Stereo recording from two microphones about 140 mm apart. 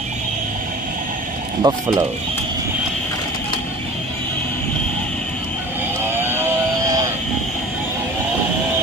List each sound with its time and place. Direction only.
1.6 s speech: 30° right (ahead or behind)
6.0 s vehicle: 15° right (ahead or behind)